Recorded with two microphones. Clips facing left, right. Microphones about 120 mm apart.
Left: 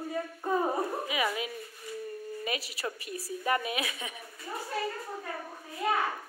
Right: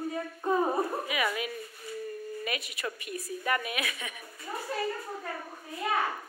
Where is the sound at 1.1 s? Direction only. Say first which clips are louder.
Even; 25° left (ahead or behind).